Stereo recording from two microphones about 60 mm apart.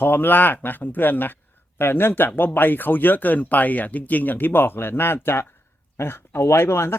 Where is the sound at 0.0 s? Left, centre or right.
Left.